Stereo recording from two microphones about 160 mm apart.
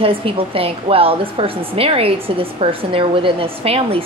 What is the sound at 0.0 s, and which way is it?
A woman's voice, 35° right (ahead or behind).